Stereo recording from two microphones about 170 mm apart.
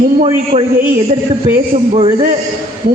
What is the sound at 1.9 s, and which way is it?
Speech, 35° right (ahead or behind).